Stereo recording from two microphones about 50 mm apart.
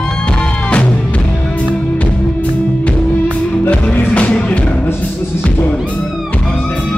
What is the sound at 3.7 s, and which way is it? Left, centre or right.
Music, left.